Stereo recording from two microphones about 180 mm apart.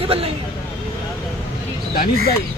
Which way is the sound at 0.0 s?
30° right (ahead or behind).